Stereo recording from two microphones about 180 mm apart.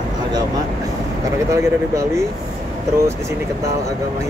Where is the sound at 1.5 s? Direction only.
15° right (ahead or behind).